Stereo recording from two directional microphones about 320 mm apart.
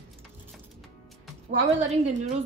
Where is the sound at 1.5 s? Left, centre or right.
Right.